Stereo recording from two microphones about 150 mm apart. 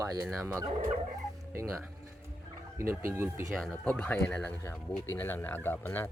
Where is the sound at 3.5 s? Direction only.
5° left (ahead or behind).